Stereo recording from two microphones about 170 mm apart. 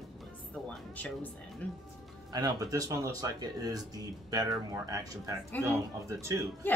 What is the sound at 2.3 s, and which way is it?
Speech, 25° right (ahead or behind).